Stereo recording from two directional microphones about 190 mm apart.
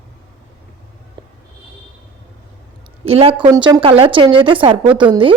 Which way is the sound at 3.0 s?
30° right (ahead or behind).